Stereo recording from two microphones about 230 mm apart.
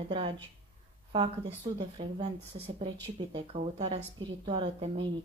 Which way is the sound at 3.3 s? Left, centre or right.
Right.